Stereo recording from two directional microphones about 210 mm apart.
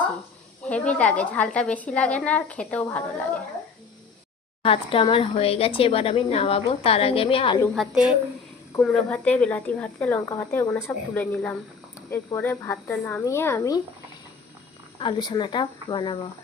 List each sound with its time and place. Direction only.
0.6 s speech: 5° left (ahead or behind)
4.6 s speech: 25° left (ahead or behind)
8.8 s speech: 5° left (ahead or behind)
14.9 s speech: 20° left (ahead or behind)